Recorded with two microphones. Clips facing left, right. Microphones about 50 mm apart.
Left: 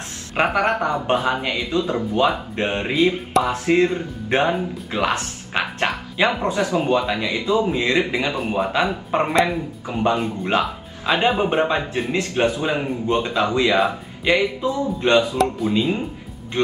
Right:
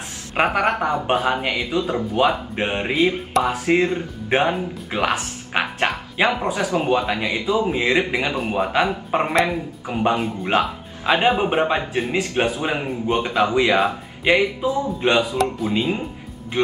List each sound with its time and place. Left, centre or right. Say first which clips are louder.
0.6 s speech: even; centre
4.9 s music: even; centre
6.2 s speech: left 1 dB; centre
8.4 s speech: even; centre
8.7 s speech: right 1 dB; centre
9.2 s speech: left 1 dB; centre
9.8 s speech: even; centre
10.1 s speech: even; centre
10.5 s speech: right 2 dB; centre